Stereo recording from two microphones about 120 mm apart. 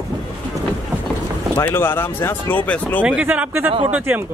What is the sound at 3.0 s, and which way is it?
Speech, 10° right (ahead or behind).